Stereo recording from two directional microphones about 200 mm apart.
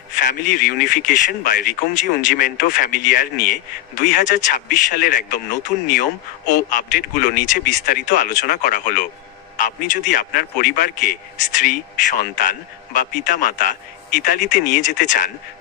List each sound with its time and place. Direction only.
0.3 s a man's voice: 45° left (ahead or behind)